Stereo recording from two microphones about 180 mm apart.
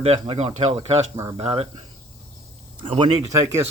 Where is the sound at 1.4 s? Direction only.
35° right (ahead or behind).